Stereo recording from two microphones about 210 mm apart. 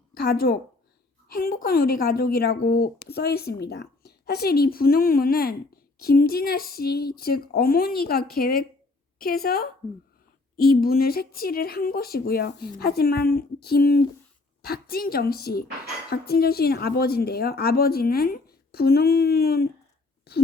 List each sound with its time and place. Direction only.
0.2 s a woman's voice: 45° left (ahead or behind)